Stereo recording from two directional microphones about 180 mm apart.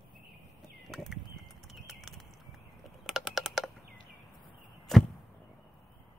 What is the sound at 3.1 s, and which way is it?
Typing, centre (ahead or behind).